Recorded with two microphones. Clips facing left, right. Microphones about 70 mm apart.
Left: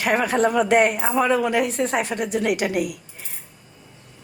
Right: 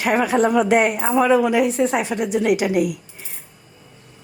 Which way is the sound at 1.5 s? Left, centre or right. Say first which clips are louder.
Right 4 dB; left.